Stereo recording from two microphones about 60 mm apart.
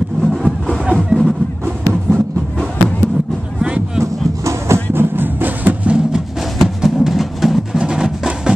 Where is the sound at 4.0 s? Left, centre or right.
Right.